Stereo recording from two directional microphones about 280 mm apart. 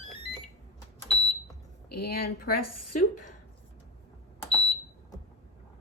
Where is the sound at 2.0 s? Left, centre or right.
Left.